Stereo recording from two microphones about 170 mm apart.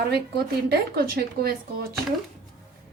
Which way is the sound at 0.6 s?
65° right (ahead or behind).